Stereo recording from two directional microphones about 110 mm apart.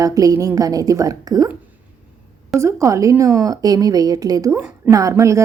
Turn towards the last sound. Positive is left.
turn(degrees=-30)  # may be behind; listen again after turning